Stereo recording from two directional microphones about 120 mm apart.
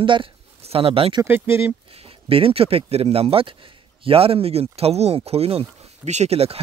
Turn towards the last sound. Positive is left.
turn(degrees=-55)  # may be behind; listen again after turning